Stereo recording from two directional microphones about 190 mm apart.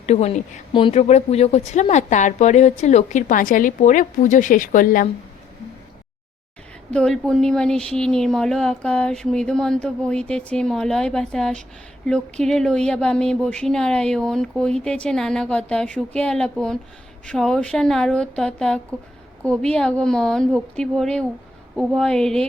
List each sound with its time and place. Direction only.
0.0 s speech: 35° left (ahead or behind)
6.9 s speech: 5° left (ahead or behind)